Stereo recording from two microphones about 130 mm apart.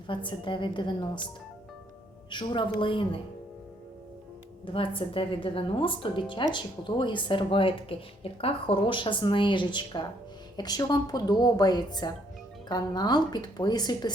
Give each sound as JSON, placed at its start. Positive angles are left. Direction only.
{"t": 0.1, "sound": "speech", "side_deg": 40}
{"t": 2.3, "sound": "speech", "side_deg": 35}
{"t": 4.6, "sound": "a woman's voice", "side_deg": 45}